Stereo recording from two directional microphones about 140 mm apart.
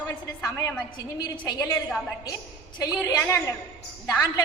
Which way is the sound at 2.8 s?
20° left (ahead or behind).